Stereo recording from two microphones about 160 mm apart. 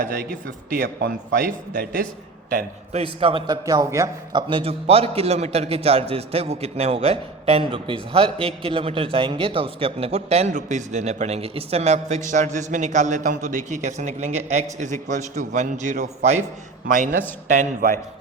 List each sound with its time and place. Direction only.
0.0 s a man's voice: 70° right (ahead or behind)
2.9 s a man's voice: 35° right (ahead or behind); by 18.0 s 55° right (ahead or behind)